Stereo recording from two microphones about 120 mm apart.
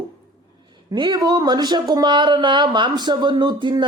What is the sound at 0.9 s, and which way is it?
Speech, 35° right (ahead or behind).